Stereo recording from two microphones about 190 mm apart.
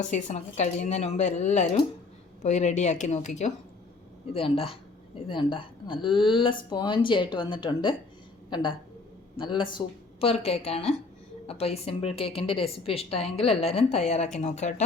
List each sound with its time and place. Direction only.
0.1 s a woman's voice: 35° left (ahead or behind)